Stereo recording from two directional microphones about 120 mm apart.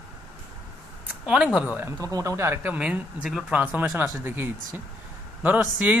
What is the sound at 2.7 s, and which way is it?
Speech, 10° right (ahead or behind).